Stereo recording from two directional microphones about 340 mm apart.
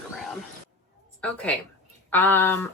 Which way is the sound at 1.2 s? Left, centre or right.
Centre.